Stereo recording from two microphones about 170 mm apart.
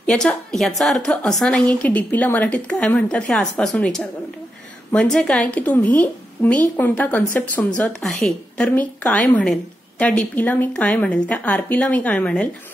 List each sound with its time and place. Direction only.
0.0 s a woman's voice: 5° left (ahead or behind)